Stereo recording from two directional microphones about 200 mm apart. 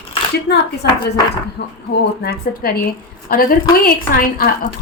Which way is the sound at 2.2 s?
50° left (ahead or behind).